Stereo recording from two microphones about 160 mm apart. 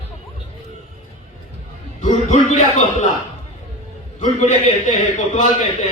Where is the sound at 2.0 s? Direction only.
50° left (ahead or behind).